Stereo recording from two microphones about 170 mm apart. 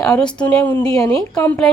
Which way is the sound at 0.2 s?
5° left (ahead or behind).